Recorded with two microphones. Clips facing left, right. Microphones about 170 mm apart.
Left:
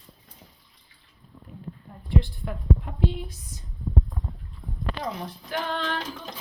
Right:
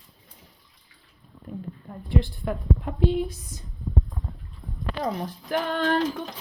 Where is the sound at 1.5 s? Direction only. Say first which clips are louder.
Right 10 dB; 50° right (ahead or behind).